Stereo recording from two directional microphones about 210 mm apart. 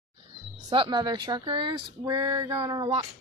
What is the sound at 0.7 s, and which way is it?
Speech, 20° right (ahead or behind).